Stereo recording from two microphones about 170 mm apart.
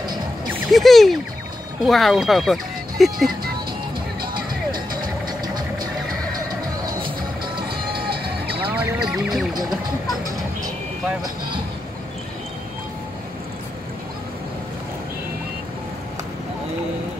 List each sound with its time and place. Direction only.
0.7 s speech: centre (ahead or behind)
4.6 s music: 25° right (ahead or behind)
7.5 s music: 65° right (ahead or behind)
8.7 s speech: 5° right (ahead or behind)